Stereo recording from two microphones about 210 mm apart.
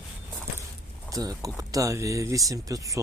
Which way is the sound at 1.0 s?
15° right (ahead or behind).